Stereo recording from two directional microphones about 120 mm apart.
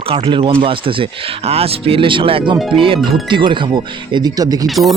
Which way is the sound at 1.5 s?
55° right (ahead or behind).